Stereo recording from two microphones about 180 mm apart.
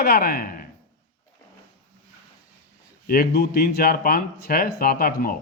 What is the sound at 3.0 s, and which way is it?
A man's voice, 60° left (ahead or behind).